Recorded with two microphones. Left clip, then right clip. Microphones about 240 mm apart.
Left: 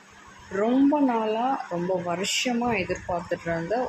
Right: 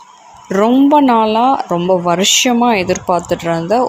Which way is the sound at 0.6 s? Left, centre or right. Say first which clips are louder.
Right 12 dB; right.